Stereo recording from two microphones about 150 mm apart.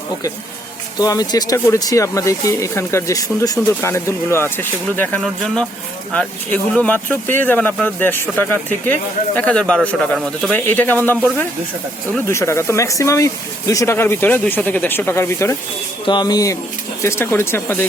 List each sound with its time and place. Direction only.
0.9 s speech: 25° left (ahead or behind)
12.3 s speech: 20° left (ahead or behind)